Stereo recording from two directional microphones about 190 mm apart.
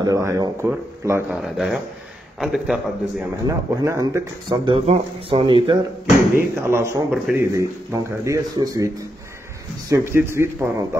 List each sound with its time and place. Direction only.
0.0 s a man's voice: 15° right (ahead or behind)
1.3 s a man's voice: centre (ahead or behind)
3.4 s speech: 15° right (ahead or behind)
6.6 s a man's voice: 15° right (ahead or behind)